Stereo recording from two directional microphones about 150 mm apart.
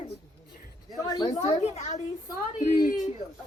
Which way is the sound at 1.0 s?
25° left (ahead or behind).